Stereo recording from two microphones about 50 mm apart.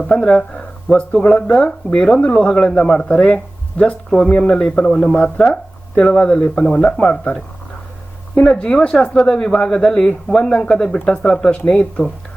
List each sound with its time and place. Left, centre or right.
0.1 s speech: centre
8.4 s speech: centre